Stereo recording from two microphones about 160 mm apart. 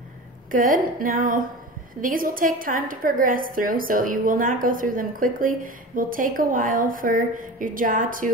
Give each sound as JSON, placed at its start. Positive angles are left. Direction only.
{"t": 0.5, "sound": "a woman's voice", "side_deg": -60}